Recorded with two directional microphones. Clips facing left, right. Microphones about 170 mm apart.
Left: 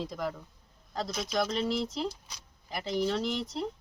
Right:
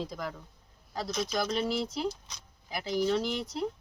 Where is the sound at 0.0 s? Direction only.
Centre (ahead or behind).